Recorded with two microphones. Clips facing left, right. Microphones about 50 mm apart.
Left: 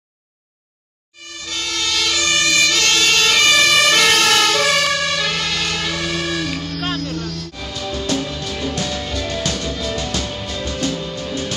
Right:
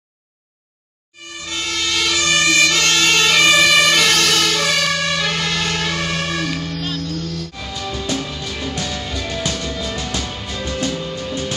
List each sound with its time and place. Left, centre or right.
1.4 s emergency vehicle: centre
2.2 s emergency vehicle: right
6.0 s music: centre
6.4 s music: centre
6.8 s music: left
7.5 s music: centre